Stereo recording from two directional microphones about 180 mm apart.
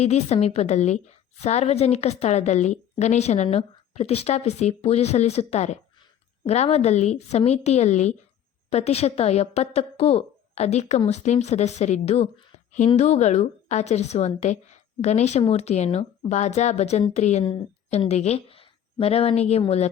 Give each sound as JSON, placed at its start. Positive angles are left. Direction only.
{"t": 0.0, "sound": "a woman's voice", "side_deg": 35}
{"t": 17.4, "sound": "a woman's voice", "side_deg": 30}